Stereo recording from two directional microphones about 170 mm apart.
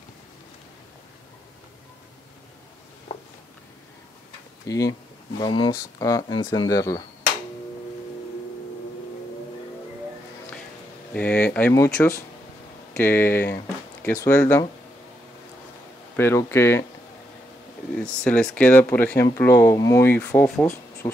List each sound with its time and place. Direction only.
3.1 s a sound: 40° left (ahead or behind)
4.6 s speech: 20° left (ahead or behind)
11.1 s speech: 10° left (ahead or behind)
16.2 s speech: 15° left (ahead or behind)
18.0 s speech: 5° left (ahead or behind)